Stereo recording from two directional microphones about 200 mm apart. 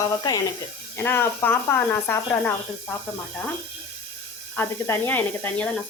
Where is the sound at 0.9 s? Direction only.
10° left (ahead or behind).